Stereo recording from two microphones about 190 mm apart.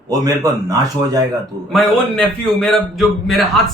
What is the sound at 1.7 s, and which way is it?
A man's voice, 5° left (ahead or behind).